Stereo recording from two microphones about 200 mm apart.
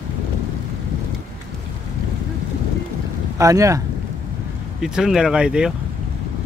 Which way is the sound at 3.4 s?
15° right (ahead or behind).